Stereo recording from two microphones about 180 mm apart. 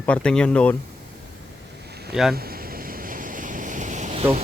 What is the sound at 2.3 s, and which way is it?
Waves, 55° right (ahead or behind).